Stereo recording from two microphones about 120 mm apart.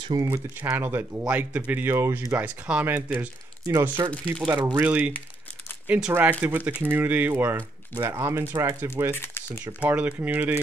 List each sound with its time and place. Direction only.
0.2 s speech: 20° right (ahead or behind)
4.1 s speech: 10° left (ahead or behind)
4.5 s speech: 40° right (ahead or behind)
4.7 s speech: 10° right (ahead or behind)
9.1 s a sound: 20° left (ahead or behind)
9.7 s speech: 15° right (ahead or behind)